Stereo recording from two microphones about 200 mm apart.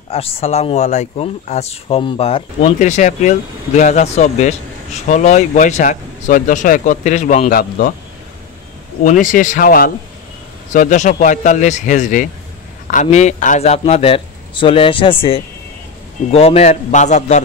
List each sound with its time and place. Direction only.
0.1 s speech: 30° left (ahead or behind)
9.0 s speech: 40° left (ahead or behind); by 15.1 s 25° left (ahead or behind)
16.3 s speech: 30° left (ahead or behind)